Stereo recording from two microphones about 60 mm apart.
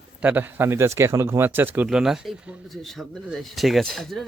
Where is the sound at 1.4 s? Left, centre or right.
Right.